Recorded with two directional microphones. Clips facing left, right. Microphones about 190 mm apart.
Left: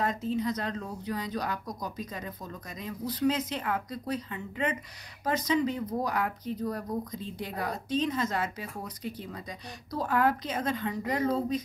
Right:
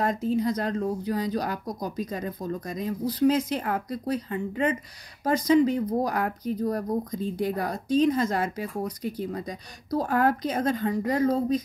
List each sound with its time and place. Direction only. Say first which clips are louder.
0.3 s a woman's voice: right 5 dB; 35° right (ahead or behind)